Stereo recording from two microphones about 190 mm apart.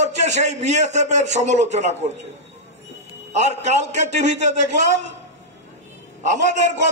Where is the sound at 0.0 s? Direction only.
35° right (ahead or behind).